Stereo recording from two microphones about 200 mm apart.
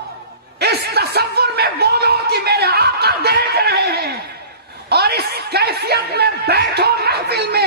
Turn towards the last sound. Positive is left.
turn(degrees=-55)  # may be behind; listen again after turning